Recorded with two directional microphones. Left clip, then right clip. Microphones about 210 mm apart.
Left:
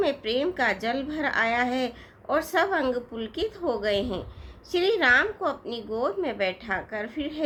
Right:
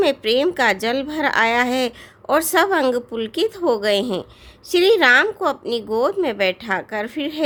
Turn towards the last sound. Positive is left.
turn(degrees=-50)  # may be behind; listen again after turning